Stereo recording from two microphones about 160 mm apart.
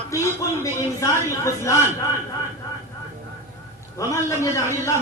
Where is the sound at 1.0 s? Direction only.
20° left (ahead or behind).